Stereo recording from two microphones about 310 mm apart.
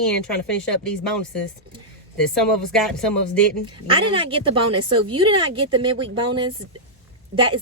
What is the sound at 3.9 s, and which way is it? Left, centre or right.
A woman's voice, centre.